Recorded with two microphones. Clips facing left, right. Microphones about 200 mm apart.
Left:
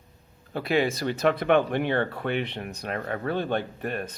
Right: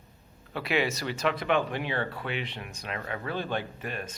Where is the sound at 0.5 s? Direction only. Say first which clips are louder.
Left 4 dB; 50° left (ahead or behind).